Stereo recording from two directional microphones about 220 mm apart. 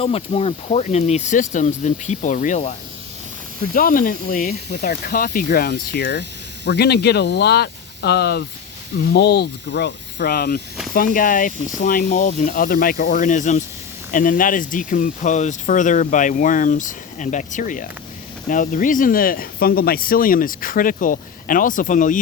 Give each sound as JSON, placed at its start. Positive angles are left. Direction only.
{"t": 0.0, "sound": "speech", "side_deg": 25}
{"t": 3.8, "sound": "speech", "side_deg": 40}